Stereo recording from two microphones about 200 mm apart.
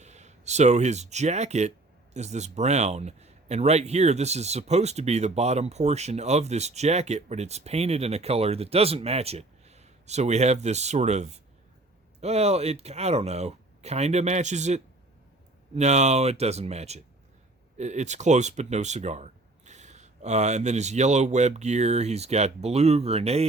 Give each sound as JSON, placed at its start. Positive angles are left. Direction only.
{"t": 0.0, "sound": "a man's voice", "side_deg": -35}